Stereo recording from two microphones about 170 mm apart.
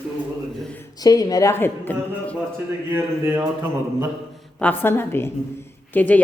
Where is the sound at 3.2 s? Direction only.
15° right (ahead or behind).